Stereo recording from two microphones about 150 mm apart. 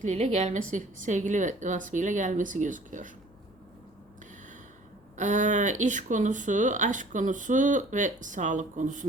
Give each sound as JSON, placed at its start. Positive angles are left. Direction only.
{"t": 0.0, "sound": "speech", "side_deg": -50}
{"t": 5.1, "sound": "speech", "side_deg": -55}